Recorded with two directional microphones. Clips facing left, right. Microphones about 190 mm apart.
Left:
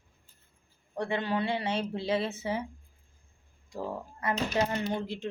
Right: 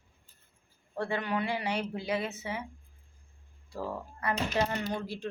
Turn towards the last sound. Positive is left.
turn(degrees=20)  # may be behind; listen again after turning